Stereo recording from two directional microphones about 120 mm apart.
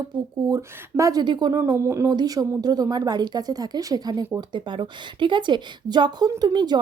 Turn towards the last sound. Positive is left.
turn(degrees=-35)  # may be behind; listen again after turning